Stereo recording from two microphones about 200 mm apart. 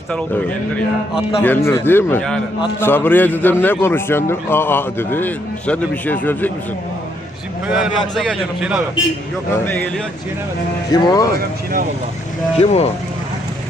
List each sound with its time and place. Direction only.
0.1 s a man's voice: 5° left (ahead or behind)
7.7 s a man's voice: centre (ahead or behind)
9.6 s a man's voice: 10° left (ahead or behind)
10.9 s speech: 20° left (ahead or behind)
11.3 s speech: 45° right (ahead or behind)
12.5 s speech: 30° left (ahead or behind)